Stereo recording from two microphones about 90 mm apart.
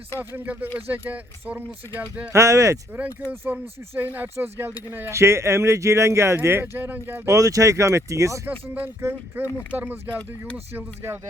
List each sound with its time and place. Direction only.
0.2 s speech: 20° right (ahead or behind)
2.3 s speech: 35° right (ahead or behind)
3.4 s speech: 20° right (ahead or behind)
7.3 s speech: 40° right (ahead or behind); by 10.0 s 20° right (ahead or behind)
10.2 s speech: 15° left (ahead or behind)
10.8 s speech: 25° right (ahead or behind)